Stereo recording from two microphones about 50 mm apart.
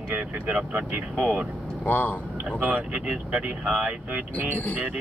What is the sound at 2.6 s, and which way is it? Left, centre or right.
Speech, right.